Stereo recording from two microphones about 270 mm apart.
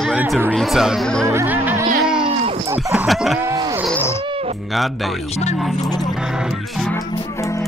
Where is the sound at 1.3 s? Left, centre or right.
Centre.